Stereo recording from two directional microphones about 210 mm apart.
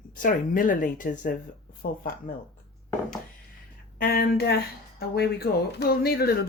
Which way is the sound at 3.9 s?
45° left (ahead or behind).